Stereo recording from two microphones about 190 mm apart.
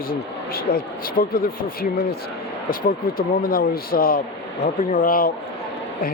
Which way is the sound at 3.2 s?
50° left (ahead or behind).